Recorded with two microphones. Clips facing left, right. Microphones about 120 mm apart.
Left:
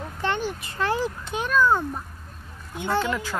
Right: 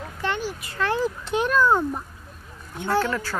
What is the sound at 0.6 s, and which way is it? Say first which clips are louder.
Speech: right 1 dB; 25° left (ahead or behind).